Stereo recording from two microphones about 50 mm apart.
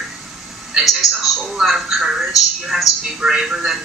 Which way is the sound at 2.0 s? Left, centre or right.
Centre.